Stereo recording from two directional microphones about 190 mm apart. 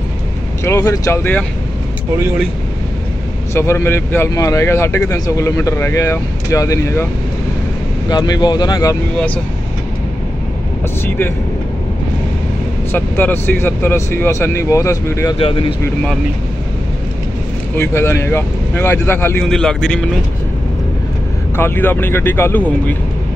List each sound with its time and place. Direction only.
0.7 s speech: 15° left (ahead or behind)
3.5 s speech: 15° left (ahead or behind)
8.1 s speech: 20° left (ahead or behind)
12.9 s speech: 10° left (ahead or behind)
15.3 s speech: 25° left (ahead or behind)
17.7 s speech: 15° left (ahead or behind)
21.5 s speech: 10° left (ahead or behind)